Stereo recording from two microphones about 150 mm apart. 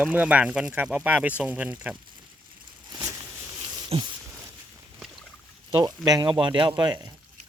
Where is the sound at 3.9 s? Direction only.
40° right (ahead or behind).